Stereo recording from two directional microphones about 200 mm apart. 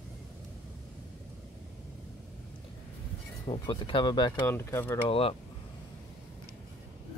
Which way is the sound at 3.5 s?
25° left (ahead or behind).